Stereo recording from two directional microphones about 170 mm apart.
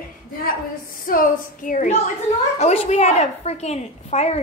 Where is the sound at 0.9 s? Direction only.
55° left (ahead or behind).